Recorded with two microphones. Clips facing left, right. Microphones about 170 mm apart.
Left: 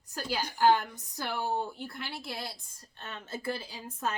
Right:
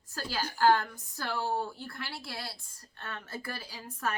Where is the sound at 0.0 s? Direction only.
15° left (ahead or behind).